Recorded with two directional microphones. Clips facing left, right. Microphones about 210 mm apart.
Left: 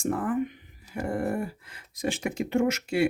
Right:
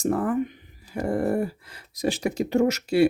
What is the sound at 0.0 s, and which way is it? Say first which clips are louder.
Speech: right 3 dB; 40° right (ahead or behind).